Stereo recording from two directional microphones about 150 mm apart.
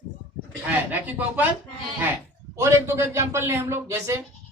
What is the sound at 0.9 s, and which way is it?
Speech, 10° right (ahead or behind).